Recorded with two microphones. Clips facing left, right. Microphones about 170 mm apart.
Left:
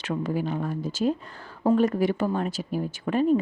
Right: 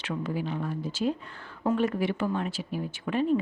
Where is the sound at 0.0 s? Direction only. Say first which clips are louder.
Left 4 dB; 45° left (ahead or behind).